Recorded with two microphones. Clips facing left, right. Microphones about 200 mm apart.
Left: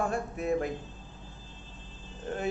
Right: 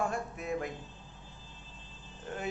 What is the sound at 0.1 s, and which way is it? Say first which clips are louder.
Speech: left 6 dB; 30° left (ahead or behind).